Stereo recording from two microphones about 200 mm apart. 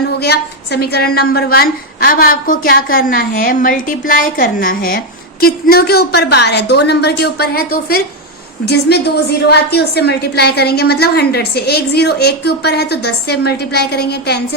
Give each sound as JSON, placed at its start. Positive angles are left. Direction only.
{"t": 0.2, "sound": "a woman's voice", "side_deg": 55}